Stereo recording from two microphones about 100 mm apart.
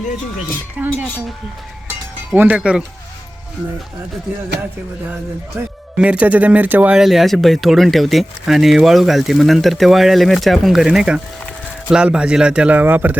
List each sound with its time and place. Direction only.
0.8 s speech: 15° right (ahead or behind)
1.9 s music: 20° right (ahead or behind)
5.5 s speech: 20° right (ahead or behind)
7.0 s speech: centre (ahead or behind); by 13.1 s 20° right (ahead or behind)